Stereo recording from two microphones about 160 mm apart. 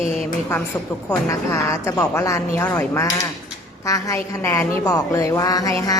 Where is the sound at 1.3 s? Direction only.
20° left (ahead or behind).